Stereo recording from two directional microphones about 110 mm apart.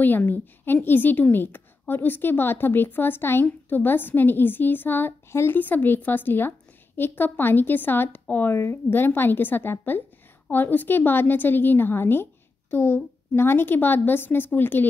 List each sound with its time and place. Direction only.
0.0 s a woman's voice: 15° left (ahead or behind)